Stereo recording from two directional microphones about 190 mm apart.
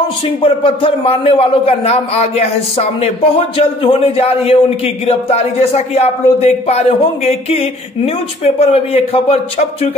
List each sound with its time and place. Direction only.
0.4 s a man's voice: 30° left (ahead or behind)